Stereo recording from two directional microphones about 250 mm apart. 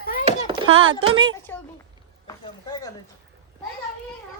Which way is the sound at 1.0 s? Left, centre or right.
Centre.